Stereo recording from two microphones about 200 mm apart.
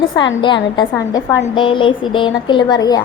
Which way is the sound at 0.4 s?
25° left (ahead or behind).